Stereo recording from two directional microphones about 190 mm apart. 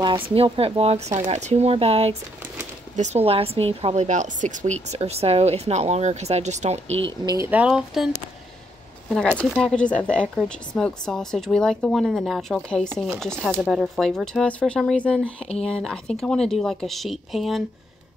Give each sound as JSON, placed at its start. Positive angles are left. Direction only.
{"t": 0.0, "sound": "speech", "side_deg": -25}
{"t": 3.3, "sound": "speech", "side_deg": -30}
{"t": 7.2, "sound": "speech", "side_deg": -15}
{"t": 9.1, "sound": "speech", "side_deg": 5}